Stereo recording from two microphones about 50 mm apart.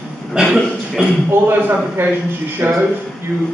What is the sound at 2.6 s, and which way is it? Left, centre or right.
Speech, right.